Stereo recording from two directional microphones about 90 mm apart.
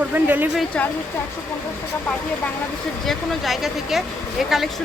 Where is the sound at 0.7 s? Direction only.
10° left (ahead or behind).